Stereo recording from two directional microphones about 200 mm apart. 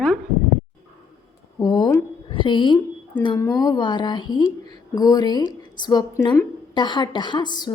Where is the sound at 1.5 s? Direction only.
20° left (ahead or behind).